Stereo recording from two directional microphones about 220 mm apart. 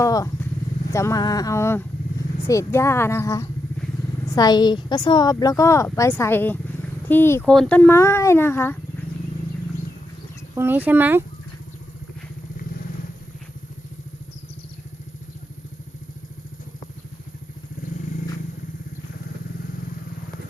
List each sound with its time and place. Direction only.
0.0 s a woman's voice: 15° left (ahead or behind)
10.5 s speech: 10° right (ahead or behind)